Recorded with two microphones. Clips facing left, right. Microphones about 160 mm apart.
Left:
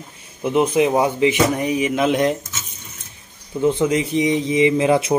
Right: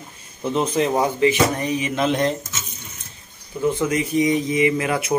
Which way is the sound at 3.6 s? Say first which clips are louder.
Left 3 dB; 20° left (ahead or behind).